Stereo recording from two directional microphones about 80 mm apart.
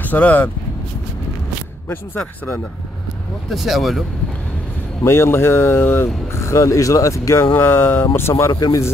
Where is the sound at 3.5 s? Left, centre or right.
Centre.